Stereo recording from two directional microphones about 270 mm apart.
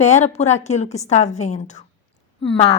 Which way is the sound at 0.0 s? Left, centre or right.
Left.